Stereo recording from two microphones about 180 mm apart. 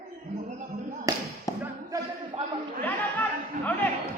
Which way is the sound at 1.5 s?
20° left (ahead or behind).